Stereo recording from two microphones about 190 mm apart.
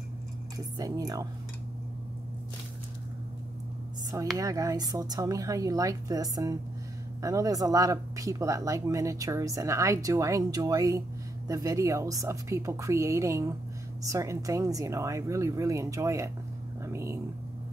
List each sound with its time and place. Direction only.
0.7 s speech: 20° right (ahead or behind)
4.4 s speech: 20° right (ahead or behind)